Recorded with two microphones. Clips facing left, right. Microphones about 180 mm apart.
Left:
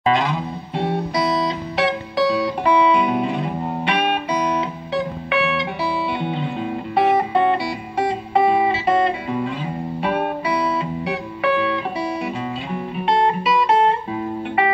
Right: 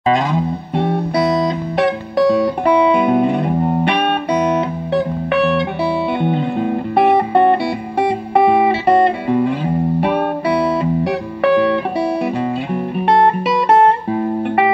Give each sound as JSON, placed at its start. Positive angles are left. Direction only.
{"t": 0.0, "sound": "music", "side_deg": -40}
{"t": 0.7, "sound": "music", "side_deg": -60}
{"t": 14.1, "sound": "music", "side_deg": -50}